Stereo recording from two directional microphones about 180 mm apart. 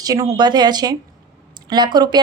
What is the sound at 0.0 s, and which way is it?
A woman's voice, 20° right (ahead or behind).